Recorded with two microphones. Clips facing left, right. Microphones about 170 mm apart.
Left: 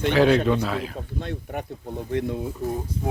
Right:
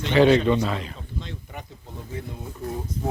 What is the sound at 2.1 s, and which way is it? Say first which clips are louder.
Speech: left 10 dB; 75° left (ahead or behind).